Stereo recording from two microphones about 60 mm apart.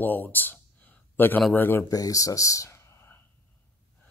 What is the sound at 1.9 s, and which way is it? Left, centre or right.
Speech, left.